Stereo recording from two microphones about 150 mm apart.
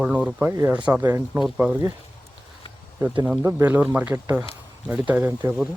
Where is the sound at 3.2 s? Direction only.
15° right (ahead or behind).